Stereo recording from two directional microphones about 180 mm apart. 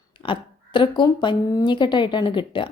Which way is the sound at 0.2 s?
25° left (ahead or behind).